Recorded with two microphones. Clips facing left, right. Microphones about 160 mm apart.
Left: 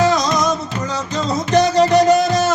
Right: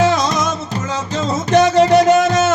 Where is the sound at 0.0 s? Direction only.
40° left (ahead or behind).